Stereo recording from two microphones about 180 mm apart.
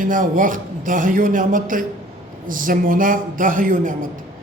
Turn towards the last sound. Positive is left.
turn(degrees=-45)  # may be behind; listen again after turning